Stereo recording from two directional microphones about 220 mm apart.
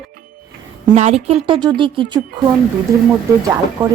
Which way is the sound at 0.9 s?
30° right (ahead or behind).